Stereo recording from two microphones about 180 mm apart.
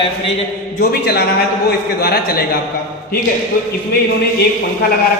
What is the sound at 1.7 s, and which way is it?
Speech, 60° left (ahead or behind).